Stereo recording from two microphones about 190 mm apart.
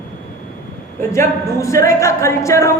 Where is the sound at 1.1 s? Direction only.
15° left (ahead or behind).